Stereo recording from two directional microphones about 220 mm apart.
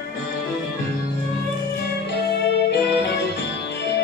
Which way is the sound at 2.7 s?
50° left (ahead or behind).